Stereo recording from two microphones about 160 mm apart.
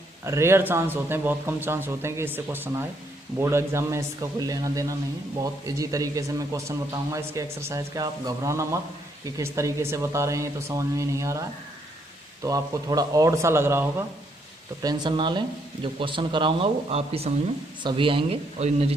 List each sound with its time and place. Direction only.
0.3 s speech: 15° right (ahead or behind)
12.5 s speech: 20° right (ahead or behind); by 18.9 s 40° right (ahead or behind)